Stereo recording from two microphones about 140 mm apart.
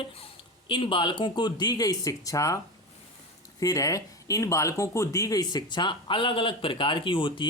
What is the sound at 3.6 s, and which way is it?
Speech, 25° left (ahead or behind).